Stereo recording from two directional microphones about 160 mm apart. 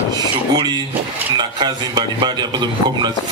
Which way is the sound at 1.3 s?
25° right (ahead or behind).